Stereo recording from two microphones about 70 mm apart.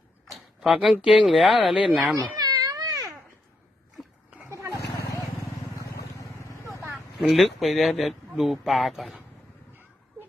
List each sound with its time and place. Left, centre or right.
0.3 s a sound: centre
1.0 s speech: centre
1.3 s speech: centre
2.4 s a sound: right
2.6 s baby cry: right
7.3 s speech: centre